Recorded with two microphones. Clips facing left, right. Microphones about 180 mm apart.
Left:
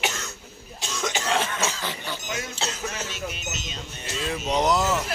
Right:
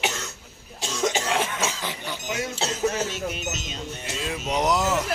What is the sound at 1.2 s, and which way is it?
Speech, 10° right (ahead or behind).